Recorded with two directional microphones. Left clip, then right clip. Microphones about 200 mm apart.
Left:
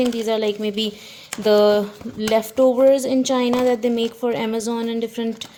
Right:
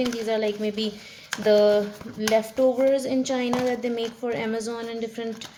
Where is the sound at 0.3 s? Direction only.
40° left (ahead or behind).